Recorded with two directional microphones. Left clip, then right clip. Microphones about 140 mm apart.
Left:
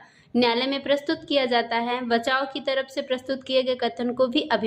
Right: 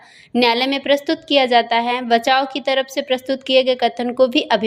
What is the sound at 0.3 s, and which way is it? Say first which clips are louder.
A woman's voice: right 6 dB; 25° right (ahead or behind).